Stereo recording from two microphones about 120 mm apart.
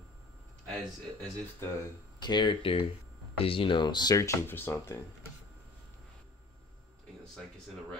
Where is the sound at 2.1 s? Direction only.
40° left (ahead or behind); by 5.0 s 20° left (ahead or behind).